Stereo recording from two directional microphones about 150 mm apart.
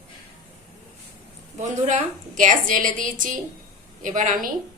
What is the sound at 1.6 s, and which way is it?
A woman's voice, 55° right (ahead or behind).